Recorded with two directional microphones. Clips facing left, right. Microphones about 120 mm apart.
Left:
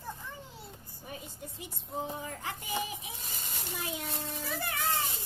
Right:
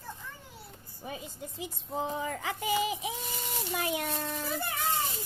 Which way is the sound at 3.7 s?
70° right (ahead or behind).